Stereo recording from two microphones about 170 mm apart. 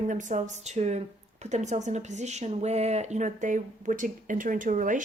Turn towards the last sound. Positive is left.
turn(degrees=-50)  # may be behind; listen again after turning